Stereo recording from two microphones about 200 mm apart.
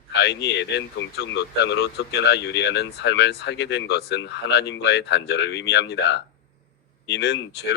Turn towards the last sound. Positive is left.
turn(degrees=55)  # may be behind; listen again after turning